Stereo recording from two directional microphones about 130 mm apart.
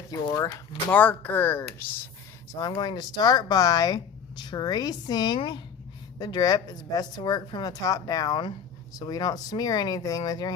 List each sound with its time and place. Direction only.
0.3 s speech: 25° left (ahead or behind)
0.9 s speech: 15° left (ahead or behind)
2.6 s speech: 30° left (ahead or behind)